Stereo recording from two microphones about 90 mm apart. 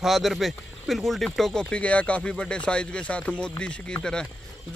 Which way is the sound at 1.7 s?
15° left (ahead or behind).